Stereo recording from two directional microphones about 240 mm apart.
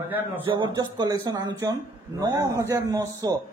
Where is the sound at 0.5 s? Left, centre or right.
Centre.